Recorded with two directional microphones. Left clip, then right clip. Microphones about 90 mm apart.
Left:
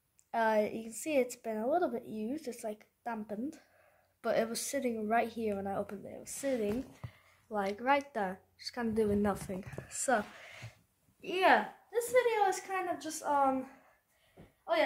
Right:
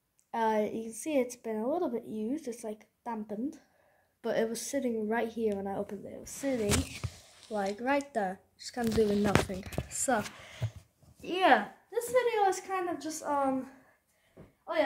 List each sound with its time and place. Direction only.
0.3 s a woman's voice: 25° left (ahead or behind)
7.5 s speech: 5° left (ahead or behind)
9.5 s speech: 20° left (ahead or behind)
11.2 s a woman's voice: centre (ahead or behind)
14.6 s a sound: 30° left (ahead or behind)